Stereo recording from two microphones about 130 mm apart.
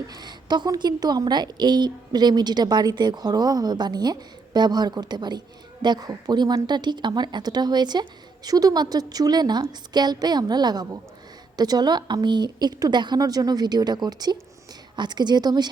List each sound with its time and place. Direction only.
0.1 s a woman's voice: 35° right (ahead or behind)